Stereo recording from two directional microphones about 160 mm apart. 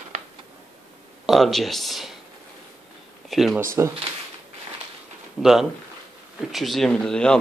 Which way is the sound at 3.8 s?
20° right (ahead or behind).